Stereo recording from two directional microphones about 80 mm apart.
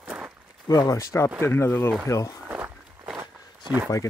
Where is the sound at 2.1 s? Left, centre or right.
Left.